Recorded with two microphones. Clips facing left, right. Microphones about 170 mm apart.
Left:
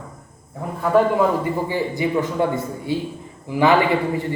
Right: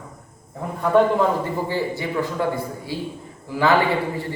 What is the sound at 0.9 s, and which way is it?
A man's voice, 5° left (ahead or behind).